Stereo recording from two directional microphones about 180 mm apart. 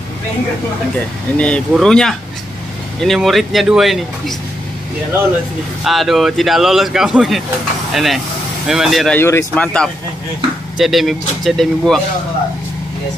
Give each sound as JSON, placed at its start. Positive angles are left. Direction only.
{"t": 1.4, "sound": "a man's voice", "side_deg": 5}
{"t": 5.9, "sound": "a man's voice", "side_deg": 0}
{"t": 9.2, "sound": "a man's voice", "side_deg": 15}